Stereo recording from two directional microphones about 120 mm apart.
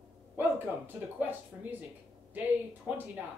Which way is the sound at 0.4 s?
15° right (ahead or behind).